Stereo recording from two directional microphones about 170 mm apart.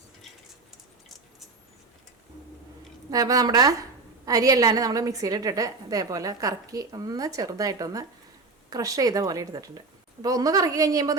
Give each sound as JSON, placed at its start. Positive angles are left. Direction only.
{"t": 3.1, "sound": "a woman's voice", "side_deg": -20}